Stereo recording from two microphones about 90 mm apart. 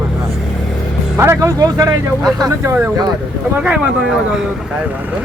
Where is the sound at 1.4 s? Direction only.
45° right (ahead or behind).